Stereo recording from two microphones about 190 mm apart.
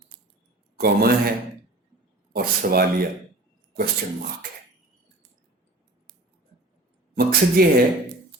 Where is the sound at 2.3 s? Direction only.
50° right (ahead or behind).